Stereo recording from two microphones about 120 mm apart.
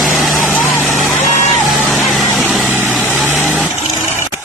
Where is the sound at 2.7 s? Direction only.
15° right (ahead or behind).